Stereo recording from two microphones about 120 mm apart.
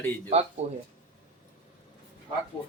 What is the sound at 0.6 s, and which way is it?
Speech, 65° right (ahead or behind).